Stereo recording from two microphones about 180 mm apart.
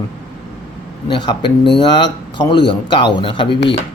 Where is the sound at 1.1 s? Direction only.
25° left (ahead or behind).